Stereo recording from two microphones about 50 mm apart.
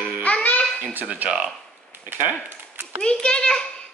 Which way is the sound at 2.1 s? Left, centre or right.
Right.